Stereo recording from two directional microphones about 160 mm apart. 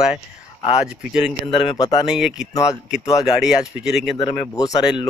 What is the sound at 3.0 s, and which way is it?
Speech, 20° left (ahead or behind).